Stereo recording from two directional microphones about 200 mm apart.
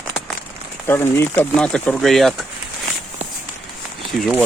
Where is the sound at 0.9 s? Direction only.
10° left (ahead or behind).